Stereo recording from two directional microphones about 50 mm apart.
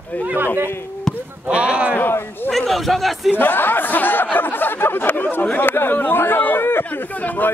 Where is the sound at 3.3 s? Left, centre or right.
Left.